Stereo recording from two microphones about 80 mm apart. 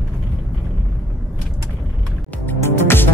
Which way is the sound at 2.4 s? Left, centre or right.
Left.